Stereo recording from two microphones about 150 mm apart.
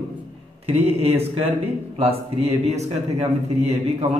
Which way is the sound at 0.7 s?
45° right (ahead or behind).